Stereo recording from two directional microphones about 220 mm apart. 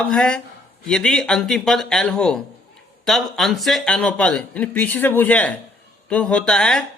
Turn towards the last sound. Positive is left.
turn(degrees=5)  # may be behind; listen again after turning